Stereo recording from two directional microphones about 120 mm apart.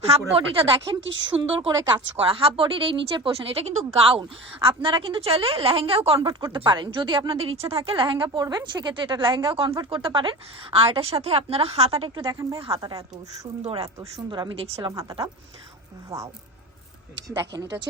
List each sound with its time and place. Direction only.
0.0 s speech: 55° right (ahead or behind)
1.4 s speech: 40° right (ahead or behind)
2.1 s a woman's voice: 55° right (ahead or behind)
12.3 s speech: 30° right (ahead or behind)
12.5 s a woman's voice: 50° right (ahead or behind)
14.3 s speech: 40° right (ahead or behind)
16.0 s speech: 25° right (ahead or behind)